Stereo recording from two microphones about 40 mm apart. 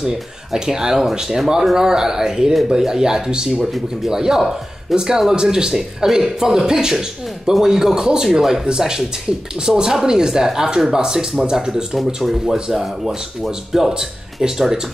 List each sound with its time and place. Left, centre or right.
0.0 s speech: centre
3.6 s speech: centre